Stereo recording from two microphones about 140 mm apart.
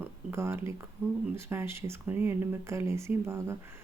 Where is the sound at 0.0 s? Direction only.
20° right (ahead or behind).